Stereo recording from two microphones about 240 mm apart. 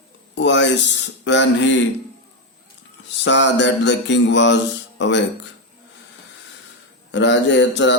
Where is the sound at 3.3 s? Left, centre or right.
Left.